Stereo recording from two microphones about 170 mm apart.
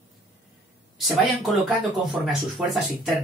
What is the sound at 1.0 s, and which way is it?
Speech, centre (ahead or behind).